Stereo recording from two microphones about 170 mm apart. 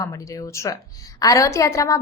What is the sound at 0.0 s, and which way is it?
A woman's voice, 20° left (ahead or behind).